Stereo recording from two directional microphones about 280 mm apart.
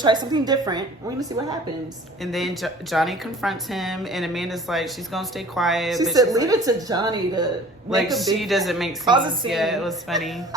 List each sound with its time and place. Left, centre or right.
0.0 s a woman's voice: centre
2.2 s a woman's voice: centre
6.1 s a woman's voice: centre
7.9 s a woman's voice: centre
9.0 s a woman's voice: centre
9.5 s a woman's voice: centre